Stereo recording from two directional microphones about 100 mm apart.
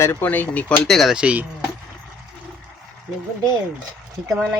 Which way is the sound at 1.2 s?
10° right (ahead or behind).